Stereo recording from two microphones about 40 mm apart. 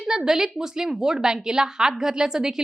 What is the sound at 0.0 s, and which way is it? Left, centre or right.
A woman's voice, centre.